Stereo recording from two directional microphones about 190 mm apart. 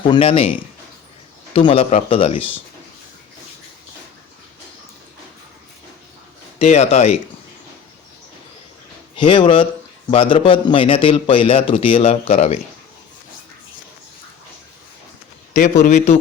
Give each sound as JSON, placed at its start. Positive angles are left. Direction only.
{"t": 0.1, "sound": "a man's voice", "side_deg": 30}
{"t": 6.6, "sound": "a man's voice", "side_deg": 35}
{"t": 9.1, "sound": "a man's voice", "side_deg": 25}
{"t": 15.5, "sound": "a man's voice", "side_deg": 40}